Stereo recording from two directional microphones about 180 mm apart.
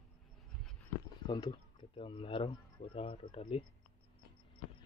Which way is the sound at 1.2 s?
25° left (ahead or behind).